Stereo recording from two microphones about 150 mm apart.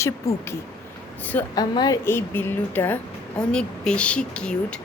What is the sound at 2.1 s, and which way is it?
Speech, 15° left (ahead or behind).